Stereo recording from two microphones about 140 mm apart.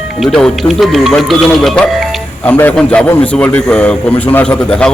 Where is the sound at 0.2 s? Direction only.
5° left (ahead or behind).